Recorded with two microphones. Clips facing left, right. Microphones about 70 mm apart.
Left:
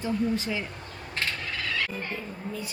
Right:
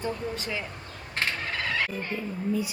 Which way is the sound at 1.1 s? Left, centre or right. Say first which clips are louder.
Right 2 dB; right.